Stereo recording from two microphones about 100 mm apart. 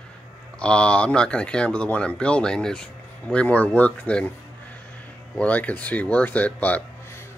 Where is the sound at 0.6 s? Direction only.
10° left (ahead or behind).